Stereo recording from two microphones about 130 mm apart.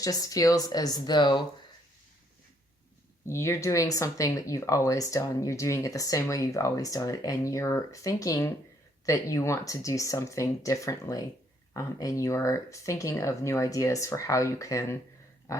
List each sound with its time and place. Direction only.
0.0 s speech: 25° left (ahead or behind)
3.2 s speech: 20° left (ahead or behind)